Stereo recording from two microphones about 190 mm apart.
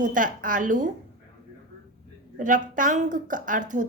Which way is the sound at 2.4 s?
45° right (ahead or behind).